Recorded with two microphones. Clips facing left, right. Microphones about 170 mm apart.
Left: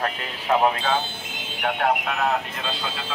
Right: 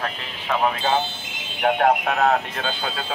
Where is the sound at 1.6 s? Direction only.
40° right (ahead or behind).